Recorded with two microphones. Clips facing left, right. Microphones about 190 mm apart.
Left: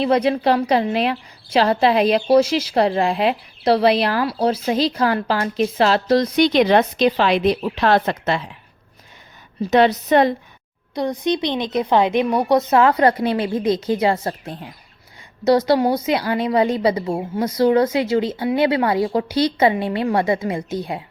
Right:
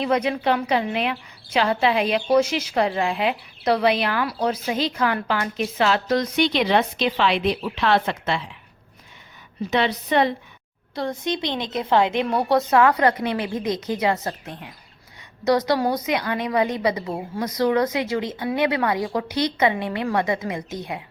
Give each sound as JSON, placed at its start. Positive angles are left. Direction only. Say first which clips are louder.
{"t": 0.0, "sound": "a woman's voice", "louder": "left 5 dB", "side_deg": 35}
{"t": 9.6, "sound": "a woman's voice", "louder": "left 7 dB", "side_deg": 40}
{"t": 10.9, "sound": "a woman's voice", "louder": "left 5 dB", "side_deg": 15}